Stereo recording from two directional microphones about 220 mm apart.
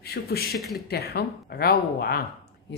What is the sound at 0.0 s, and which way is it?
Speech, 45° left (ahead or behind).